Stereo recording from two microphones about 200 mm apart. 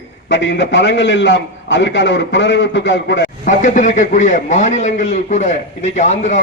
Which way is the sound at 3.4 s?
40° left (ahead or behind).